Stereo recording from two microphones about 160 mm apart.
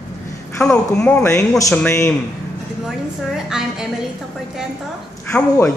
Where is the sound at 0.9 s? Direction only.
5° left (ahead or behind).